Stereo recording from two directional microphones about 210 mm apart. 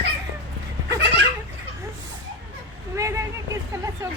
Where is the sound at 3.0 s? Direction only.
15° right (ahead or behind).